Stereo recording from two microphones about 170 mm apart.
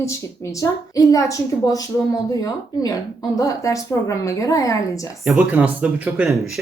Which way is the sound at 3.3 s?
20° left (ahead or behind).